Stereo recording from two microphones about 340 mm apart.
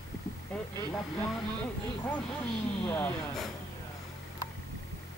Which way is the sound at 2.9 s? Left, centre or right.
Centre.